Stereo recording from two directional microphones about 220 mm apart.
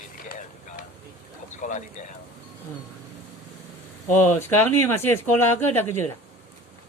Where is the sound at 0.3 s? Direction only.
40° left (ahead or behind).